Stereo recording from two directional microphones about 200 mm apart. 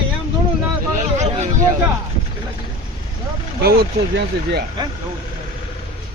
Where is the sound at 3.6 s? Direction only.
55° right (ahead or behind).